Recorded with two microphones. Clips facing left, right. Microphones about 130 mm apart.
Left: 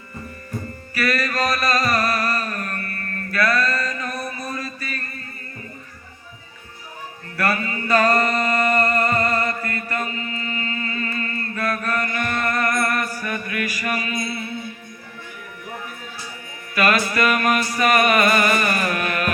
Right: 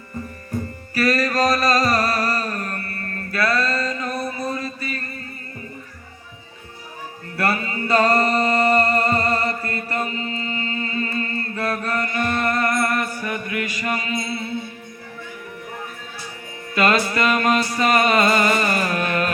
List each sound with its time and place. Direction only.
0.9 s music: 40° right (ahead or behind)
7.3 s music: 25° right (ahead or behind)
16.7 s music: 25° right (ahead or behind)